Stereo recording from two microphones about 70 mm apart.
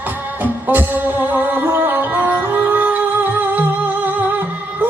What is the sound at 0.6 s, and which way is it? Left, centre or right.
Music, right.